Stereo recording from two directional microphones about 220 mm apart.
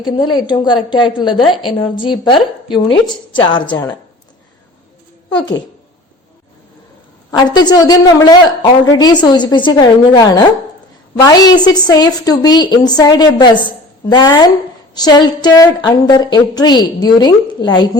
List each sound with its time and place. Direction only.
0.0 s a woman's voice: 20° left (ahead or behind)
5.3 s a woman's voice: 20° left (ahead or behind)
7.3 s a woman's voice: 20° left (ahead or behind)